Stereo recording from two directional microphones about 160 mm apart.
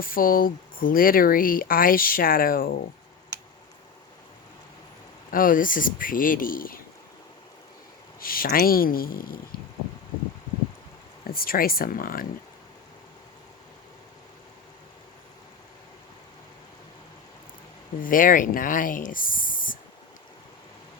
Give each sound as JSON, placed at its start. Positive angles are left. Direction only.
{"t": 0.0, "sound": "speech", "side_deg": 65}
{"t": 5.3, "sound": "speech", "side_deg": 60}
{"t": 8.2, "sound": "speech", "side_deg": 65}
{"t": 11.3, "sound": "speech", "side_deg": 65}
{"t": 18.0, "sound": "speech", "side_deg": 60}